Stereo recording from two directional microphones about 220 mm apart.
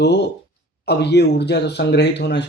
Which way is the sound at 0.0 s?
50° left (ahead or behind).